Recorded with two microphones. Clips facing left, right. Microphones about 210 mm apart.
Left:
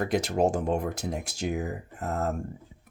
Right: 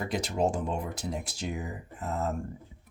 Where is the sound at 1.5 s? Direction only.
65° left (ahead or behind).